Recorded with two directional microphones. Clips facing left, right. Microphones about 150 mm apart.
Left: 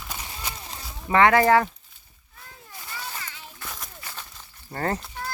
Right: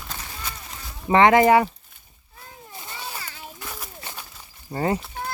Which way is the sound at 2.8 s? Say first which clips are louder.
Right 1 dB; 25° right (ahead or behind).